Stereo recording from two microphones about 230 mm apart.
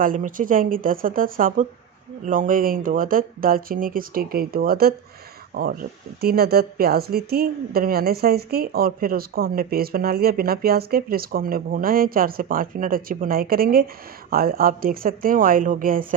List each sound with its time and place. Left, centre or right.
0.0 s speech: right